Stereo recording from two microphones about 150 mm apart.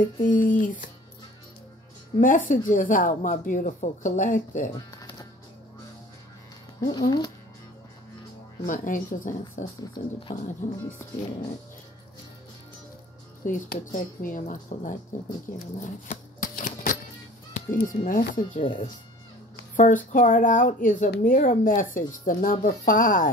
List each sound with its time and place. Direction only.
0.0 s speech: 60° left (ahead or behind)
2.1 s speech: 60° left (ahead or behind)
4.7 s music: 25° left (ahead or behind)
6.8 s speech: 30° left (ahead or behind)
8.6 s speech: 65° left (ahead or behind)
13.5 s speech: 60° left (ahead or behind)
15.6 s shuffling cards: 60° left (ahead or behind)
17.8 s speech: 65° left (ahead or behind)
18.6 s speech: 35° left (ahead or behind)
19.7 s speech: 60° left (ahead or behind)